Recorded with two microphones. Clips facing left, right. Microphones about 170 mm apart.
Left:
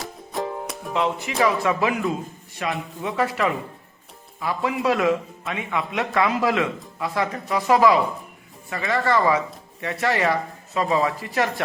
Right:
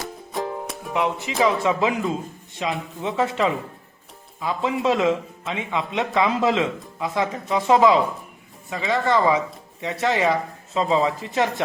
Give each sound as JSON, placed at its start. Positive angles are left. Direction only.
{"t": 0.0, "sound": "music", "side_deg": 0}
{"t": 0.9, "sound": "speech", "side_deg": -15}